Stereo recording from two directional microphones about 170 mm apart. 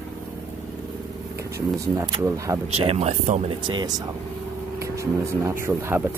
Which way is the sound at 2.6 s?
35° right (ahead or behind).